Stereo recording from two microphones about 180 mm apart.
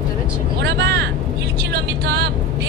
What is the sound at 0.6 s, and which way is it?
Speech, 70° right (ahead or behind).